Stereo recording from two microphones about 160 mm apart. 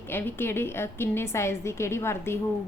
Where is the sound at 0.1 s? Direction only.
15° left (ahead or behind).